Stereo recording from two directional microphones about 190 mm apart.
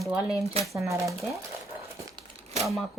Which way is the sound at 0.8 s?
15° right (ahead or behind).